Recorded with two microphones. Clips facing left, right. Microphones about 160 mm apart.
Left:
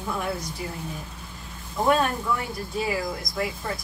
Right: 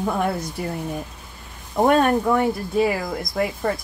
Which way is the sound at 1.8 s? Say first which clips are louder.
Right 6 dB; 55° right (ahead or behind).